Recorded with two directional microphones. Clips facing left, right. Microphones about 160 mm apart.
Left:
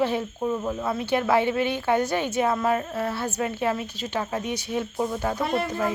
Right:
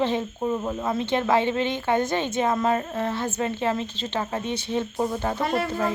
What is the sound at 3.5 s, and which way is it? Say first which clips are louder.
Speech: even; 10° left (ahead or behind).